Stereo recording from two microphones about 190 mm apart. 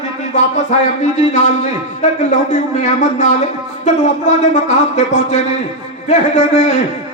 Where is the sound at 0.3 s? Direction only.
40° left (ahead or behind).